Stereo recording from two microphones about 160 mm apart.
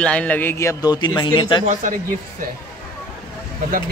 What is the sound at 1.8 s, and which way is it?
Speech, 55° right (ahead or behind).